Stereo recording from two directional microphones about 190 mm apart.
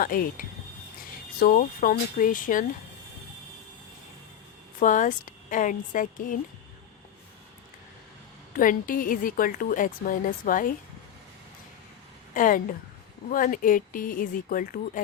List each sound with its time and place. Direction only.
0.0 s a woman's voice: 50° left (ahead or behind)
4.8 s a woman's voice: 45° left (ahead or behind)
8.5 s a woman's voice: 45° left (ahead or behind)
12.3 s a woman's voice: 45° left (ahead or behind)